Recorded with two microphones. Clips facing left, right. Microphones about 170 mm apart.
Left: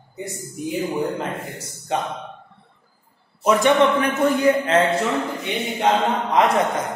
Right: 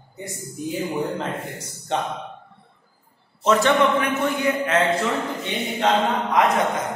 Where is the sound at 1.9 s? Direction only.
5° left (ahead or behind).